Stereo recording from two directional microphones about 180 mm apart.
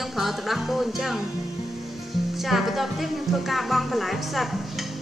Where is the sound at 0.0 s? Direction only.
Centre (ahead or behind).